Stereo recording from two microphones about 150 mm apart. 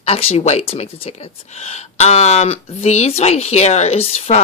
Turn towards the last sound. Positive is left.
turn(degrees=45)  # may be behind; listen again after turning